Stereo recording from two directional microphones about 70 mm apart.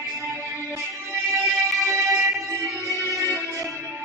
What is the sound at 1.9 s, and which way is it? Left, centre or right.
Music, right.